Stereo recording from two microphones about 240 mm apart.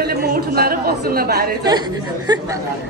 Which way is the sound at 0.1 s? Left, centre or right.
Right.